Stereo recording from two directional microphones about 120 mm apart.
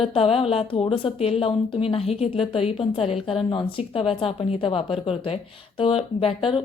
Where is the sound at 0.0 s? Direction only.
55° left (ahead or behind).